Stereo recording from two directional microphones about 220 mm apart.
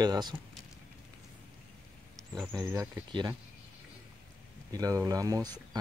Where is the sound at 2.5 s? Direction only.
15° right (ahead or behind).